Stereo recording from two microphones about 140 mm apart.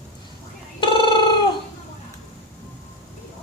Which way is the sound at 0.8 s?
35° left (ahead or behind).